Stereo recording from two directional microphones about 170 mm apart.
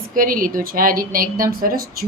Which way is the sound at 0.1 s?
55° right (ahead or behind).